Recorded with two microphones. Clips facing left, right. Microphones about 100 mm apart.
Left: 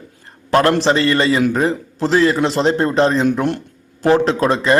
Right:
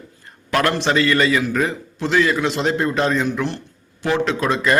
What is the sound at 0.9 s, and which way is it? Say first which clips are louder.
Speech: left 2 dB; 30° left (ahead or behind).